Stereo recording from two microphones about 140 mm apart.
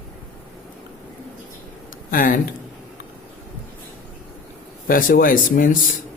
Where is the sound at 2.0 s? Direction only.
80° left.